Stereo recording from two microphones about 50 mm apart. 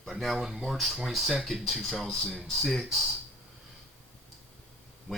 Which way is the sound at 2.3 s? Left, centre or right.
Centre.